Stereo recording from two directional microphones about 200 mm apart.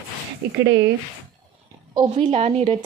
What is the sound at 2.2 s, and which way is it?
Speech, 30° right (ahead or behind).